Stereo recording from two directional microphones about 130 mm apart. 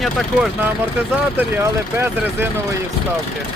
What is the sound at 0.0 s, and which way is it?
Speech, centre (ahead or behind).